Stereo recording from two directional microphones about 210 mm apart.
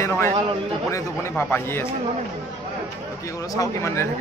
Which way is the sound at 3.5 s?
15° left (ahead or behind).